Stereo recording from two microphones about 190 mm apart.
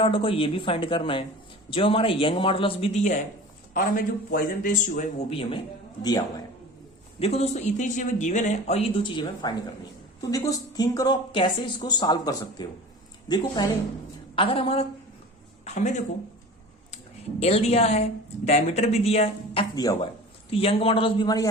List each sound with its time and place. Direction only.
0.0 s speech: 30° left (ahead or behind)
7.2 s speech: 30° left (ahead or behind)
17.4 s speech: 35° left (ahead or behind)
19.7 s speech: 20° left (ahead or behind)
20.5 s speech: 30° left (ahead or behind)